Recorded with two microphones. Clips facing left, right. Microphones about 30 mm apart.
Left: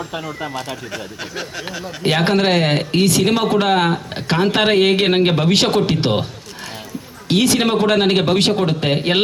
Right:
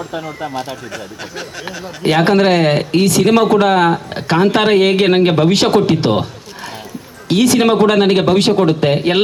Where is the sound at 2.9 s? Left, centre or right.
Left.